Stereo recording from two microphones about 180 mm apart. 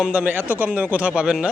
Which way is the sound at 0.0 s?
5° right (ahead or behind).